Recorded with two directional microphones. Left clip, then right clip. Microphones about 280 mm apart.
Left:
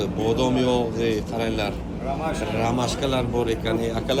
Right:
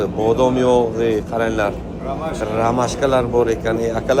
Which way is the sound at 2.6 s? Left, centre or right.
Centre.